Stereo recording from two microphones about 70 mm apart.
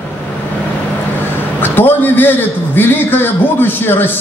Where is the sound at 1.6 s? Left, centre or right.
Left.